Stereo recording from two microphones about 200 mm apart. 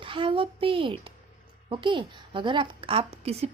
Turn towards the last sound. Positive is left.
turn(degrees=-30)  # may be behind; listen again after turning